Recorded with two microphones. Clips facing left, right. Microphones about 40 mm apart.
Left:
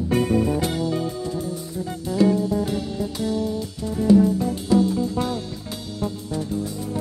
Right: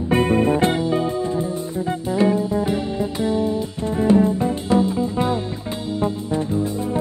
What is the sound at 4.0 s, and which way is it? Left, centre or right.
Music, right.